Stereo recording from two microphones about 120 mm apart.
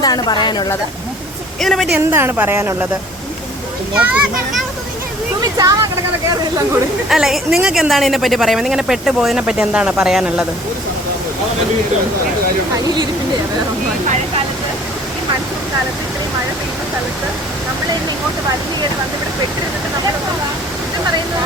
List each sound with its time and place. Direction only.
0.0 s a woman's voice: 35° left (ahead or behind)
1.6 s a woman's voice: centre (ahead or behind)
2.0 s a woman's voice: 20° right (ahead or behind)
3.9 s a child's voice: 5° right (ahead or behind)
5.4 s speech: 30° right (ahead or behind)
7.1 s a woman's voice: 5° right (ahead or behind)